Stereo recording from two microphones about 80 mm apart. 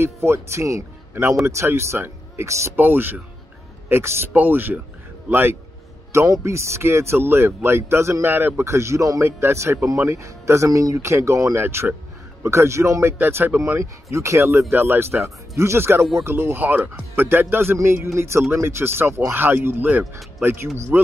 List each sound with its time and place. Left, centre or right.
0.0 s speech: right
2.8 s speech: right
4.3 s speech: right
6.1 s speech: right